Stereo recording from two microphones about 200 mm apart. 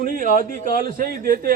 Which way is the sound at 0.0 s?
40° right (ahead or behind).